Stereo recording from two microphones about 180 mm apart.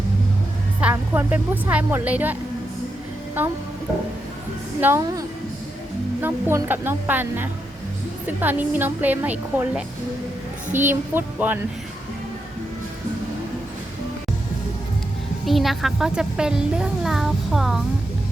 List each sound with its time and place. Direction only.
0.8 s speech: 10° right (ahead or behind)
4.8 s speech: 15° right (ahead or behind)
6.2 s speech: 10° right (ahead or behind)
10.7 s a child's voice: 45° right (ahead or behind)
11.1 s speech: 10° right (ahead or behind)
15.4 s a child's voice: centre (ahead or behind)